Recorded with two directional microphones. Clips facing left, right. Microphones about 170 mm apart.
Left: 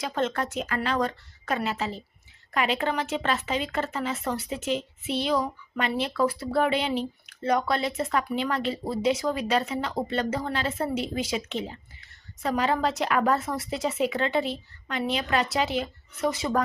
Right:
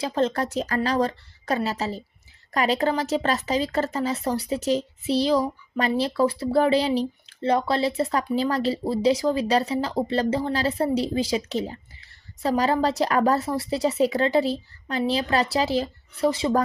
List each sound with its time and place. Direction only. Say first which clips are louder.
0.0 s speech: right 4 dB; 35° right (ahead or behind)